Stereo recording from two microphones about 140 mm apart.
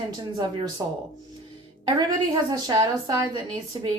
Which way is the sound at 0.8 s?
20° right (ahead or behind).